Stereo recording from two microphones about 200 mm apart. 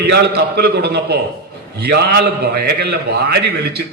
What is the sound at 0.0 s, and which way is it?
A man's voice, 55° right (ahead or behind).